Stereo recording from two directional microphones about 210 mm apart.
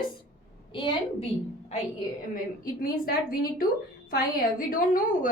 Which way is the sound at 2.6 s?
45° left (ahead or behind).